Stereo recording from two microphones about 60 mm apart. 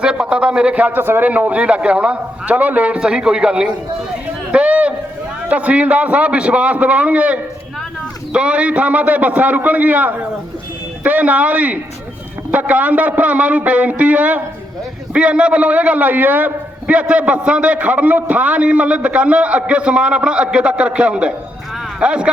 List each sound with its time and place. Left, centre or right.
0.0 s a man's voice: centre
0.9 s a man's voice: right
1.3 s a man's voice: right
4.5 s a sound: right
5.5 s a man's voice: right